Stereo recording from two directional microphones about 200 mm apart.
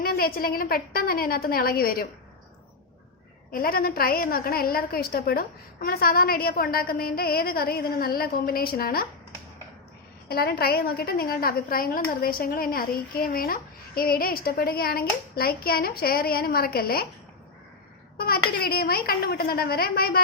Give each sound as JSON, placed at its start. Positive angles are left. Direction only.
{"t": 0.0, "sound": "a woman's voice", "side_deg": 50}
{"t": 3.5, "sound": "a woman's voice", "side_deg": 45}
{"t": 10.2, "sound": "a woman's voice", "side_deg": 50}
{"t": 18.2, "sound": "a woman's voice", "side_deg": 50}